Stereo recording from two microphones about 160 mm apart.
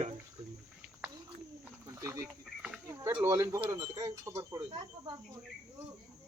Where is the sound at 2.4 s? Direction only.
5° right (ahead or behind).